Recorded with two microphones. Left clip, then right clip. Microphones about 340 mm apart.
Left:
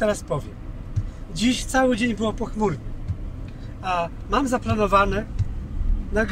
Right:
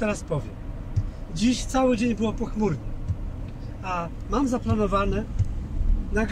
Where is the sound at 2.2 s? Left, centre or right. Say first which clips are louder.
Left 2 dB; left.